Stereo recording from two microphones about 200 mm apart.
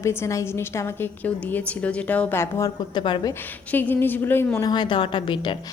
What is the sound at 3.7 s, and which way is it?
A woman's voice, 10° left (ahead or behind).